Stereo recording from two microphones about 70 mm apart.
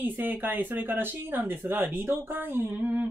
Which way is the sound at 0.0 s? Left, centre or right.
Right.